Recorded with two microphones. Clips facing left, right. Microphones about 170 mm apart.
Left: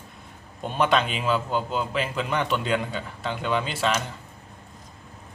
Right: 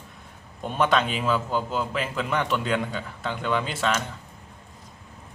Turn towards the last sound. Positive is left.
turn(degrees=0)  # may be behind; listen again after turning